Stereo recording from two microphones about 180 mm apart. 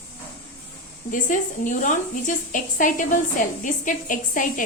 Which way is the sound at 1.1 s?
45° left (ahead or behind).